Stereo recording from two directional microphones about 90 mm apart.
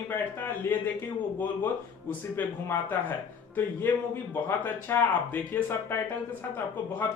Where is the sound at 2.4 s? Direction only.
20° left (ahead or behind).